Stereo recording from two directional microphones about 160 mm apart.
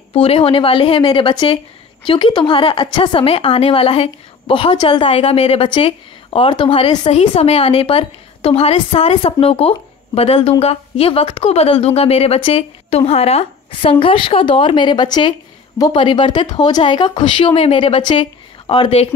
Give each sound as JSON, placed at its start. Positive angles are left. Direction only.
{"t": 0.1, "sound": "a woman's voice", "side_deg": 35}